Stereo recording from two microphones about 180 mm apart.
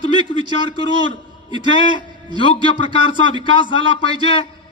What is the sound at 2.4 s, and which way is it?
A man's voice, 30° left (ahead or behind).